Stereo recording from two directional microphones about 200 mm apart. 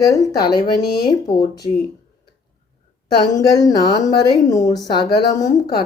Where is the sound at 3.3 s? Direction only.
20° left (ahead or behind).